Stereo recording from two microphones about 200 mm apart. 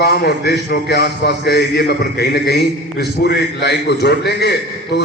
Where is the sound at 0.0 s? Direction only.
55° left (ahead or behind).